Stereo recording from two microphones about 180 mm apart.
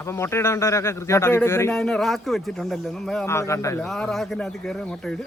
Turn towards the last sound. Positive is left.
turn(degrees=5)  # may be behind; listen again after turning